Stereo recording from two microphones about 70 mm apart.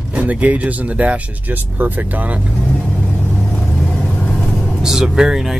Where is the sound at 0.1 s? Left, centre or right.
Right.